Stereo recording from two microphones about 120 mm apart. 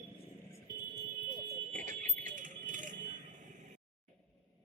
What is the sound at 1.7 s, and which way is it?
Vehicle, 90° right.